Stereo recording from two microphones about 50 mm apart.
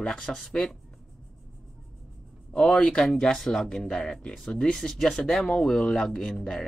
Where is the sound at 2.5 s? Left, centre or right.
Centre.